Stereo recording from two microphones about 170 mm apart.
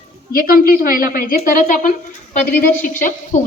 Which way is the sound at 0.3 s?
55° left (ahead or behind).